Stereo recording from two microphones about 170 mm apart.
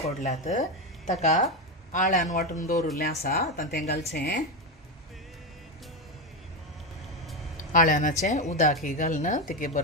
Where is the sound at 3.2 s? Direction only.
65° left (ahead or behind).